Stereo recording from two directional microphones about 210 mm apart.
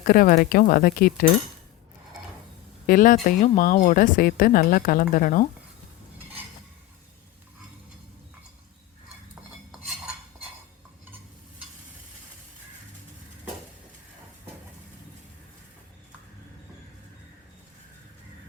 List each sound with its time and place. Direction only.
0.0 s speech: 40° left (ahead or behind)
2.8 s speech: 40° left (ahead or behind)